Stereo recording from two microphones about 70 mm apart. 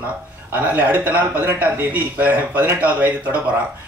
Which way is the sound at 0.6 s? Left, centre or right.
Right.